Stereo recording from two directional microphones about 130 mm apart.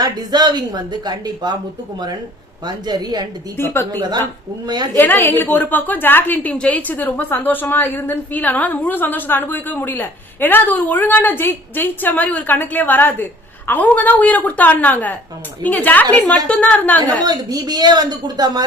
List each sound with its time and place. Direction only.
0.0 s speech: 30° right (ahead or behind)
2.6 s speech: 35° right (ahead or behind)
3.6 s a woman's voice: 20° left (ahead or behind)
4.6 s speech: 30° right (ahead or behind)
4.9 s a woman's voice: 15° left (ahead or behind)
17.2 s speech: 30° right (ahead or behind)